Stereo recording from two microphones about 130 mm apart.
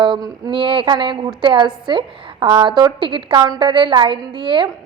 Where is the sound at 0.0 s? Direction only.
35° right (ahead or behind).